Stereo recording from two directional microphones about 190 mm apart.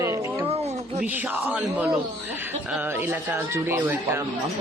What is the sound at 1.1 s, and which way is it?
Speech, 10° right (ahead or behind).